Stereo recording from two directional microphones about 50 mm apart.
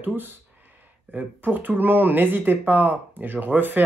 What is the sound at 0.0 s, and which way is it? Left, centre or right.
Speech, right.